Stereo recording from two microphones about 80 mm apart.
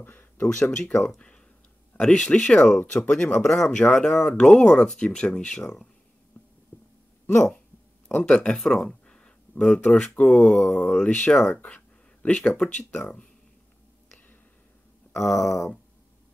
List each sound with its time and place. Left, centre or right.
0.0 s a sound: left
0.6 s speech: centre
3.3 s speech: centre
6.4 s whispering: left
6.7 s a sound: left
7.2 s speech: left
8.1 s speech: centre
10.9 s speech: centre
15.1 s speech: centre